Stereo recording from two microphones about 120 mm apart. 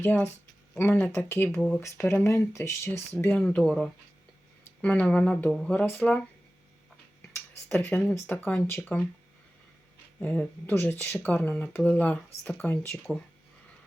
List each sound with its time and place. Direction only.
0.0 s speech: 15° left (ahead or behind)
3.3 s speech: 10° left (ahead or behind)
5.8 s speech: 15° left (ahead or behind)
7.7 s speech: 15° left (ahead or behind)
10.2 s speech: 10° left (ahead or behind)